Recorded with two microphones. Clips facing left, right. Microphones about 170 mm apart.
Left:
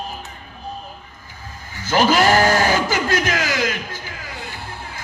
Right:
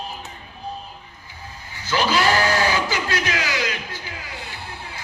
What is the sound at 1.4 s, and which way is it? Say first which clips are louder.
Sheep: left 3 dB; 45° left (ahead or behind).